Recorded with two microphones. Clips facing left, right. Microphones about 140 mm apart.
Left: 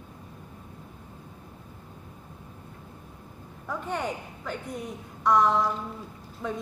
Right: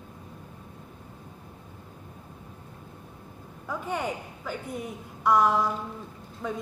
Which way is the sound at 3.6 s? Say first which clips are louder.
Even; 5° right (ahead or behind).